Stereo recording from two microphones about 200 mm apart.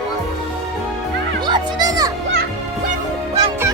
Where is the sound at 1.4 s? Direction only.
20° right (ahead or behind).